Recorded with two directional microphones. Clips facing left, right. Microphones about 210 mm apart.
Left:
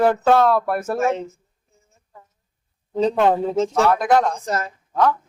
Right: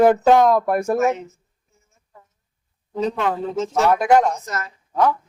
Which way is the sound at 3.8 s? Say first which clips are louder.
Right 3 dB; 10° right (ahead or behind).